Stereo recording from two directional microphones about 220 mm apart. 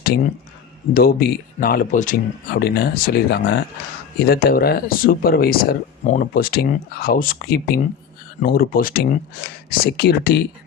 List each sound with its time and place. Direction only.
0.9 s speech: 40° left (ahead or behind)